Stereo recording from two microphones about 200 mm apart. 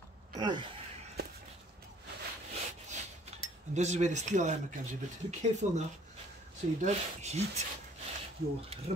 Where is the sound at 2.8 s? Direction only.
35° right (ahead or behind).